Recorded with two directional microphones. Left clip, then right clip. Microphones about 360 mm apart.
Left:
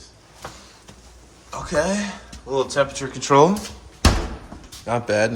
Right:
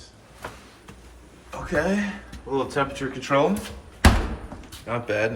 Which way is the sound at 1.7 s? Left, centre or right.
Centre.